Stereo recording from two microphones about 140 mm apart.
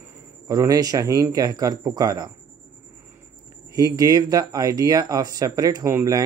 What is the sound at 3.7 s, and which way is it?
Speech, 25° right (ahead or behind).